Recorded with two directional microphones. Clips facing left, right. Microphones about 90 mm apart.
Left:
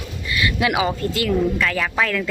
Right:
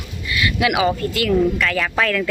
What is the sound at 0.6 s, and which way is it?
Speech, 25° left (ahead or behind).